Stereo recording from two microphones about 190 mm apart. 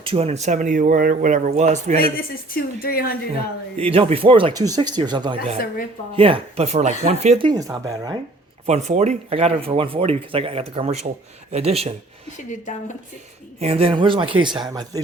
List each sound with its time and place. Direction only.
0.0 s speech: 30° right (ahead or behind)
2.6 s speech: 50° left (ahead or behind)
3.8 s speech: 30° right (ahead or behind)
5.5 s speech: 50° left (ahead or behind)
6.1 s speech: 30° right (ahead or behind)
8.6 s speech: 35° right (ahead or behind)
12.5 s a woman's voice: 40° left (ahead or behind)
13.6 s speech: 30° right (ahead or behind)